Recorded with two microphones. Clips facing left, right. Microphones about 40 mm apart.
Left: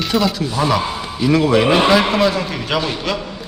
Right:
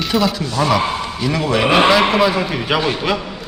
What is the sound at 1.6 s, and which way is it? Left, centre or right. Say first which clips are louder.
Speech: right 1 dB; centre.